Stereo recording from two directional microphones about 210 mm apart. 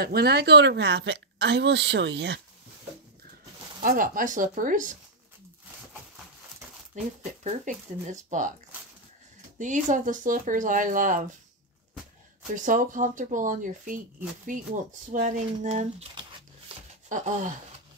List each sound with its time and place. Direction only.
0.0 s a woman's voice: 50° right (ahead or behind)
3.8 s speech: 40° right (ahead or behind)
7.0 s speech: 35° right (ahead or behind)
9.6 s speech: 35° right (ahead or behind)
12.5 s speech: 40° right (ahead or behind)